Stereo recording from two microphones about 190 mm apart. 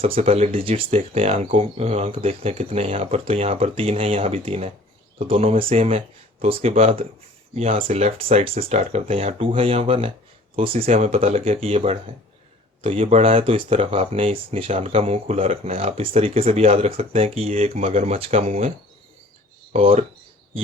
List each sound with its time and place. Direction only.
0.0 s speech: 30° right (ahead or behind)
19.7 s speech: 30° right (ahead or behind)